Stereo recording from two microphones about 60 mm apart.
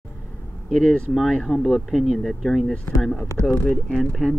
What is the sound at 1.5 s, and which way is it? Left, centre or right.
Speech, centre.